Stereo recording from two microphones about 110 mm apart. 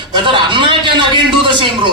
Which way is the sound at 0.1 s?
45° right (ahead or behind).